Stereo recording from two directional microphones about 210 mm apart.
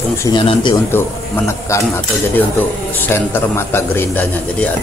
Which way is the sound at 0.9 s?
10° left (ahead or behind).